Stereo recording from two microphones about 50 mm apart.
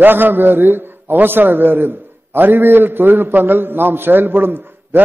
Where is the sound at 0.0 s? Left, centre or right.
Right.